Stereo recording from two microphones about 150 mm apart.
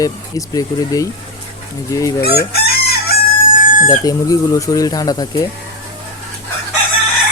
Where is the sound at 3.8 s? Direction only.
25° left (ahead or behind).